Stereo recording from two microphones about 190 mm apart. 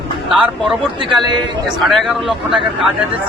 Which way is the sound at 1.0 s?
25° right (ahead or behind).